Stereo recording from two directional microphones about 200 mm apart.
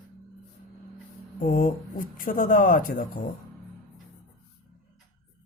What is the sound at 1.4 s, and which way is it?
Speech, 45° left (ahead or behind).